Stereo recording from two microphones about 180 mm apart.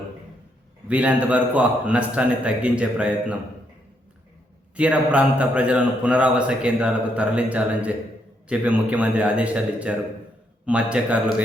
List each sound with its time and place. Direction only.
0.9 s a man's voice: 10° right (ahead or behind)
4.8 s a man's voice: 5° right (ahead or behind)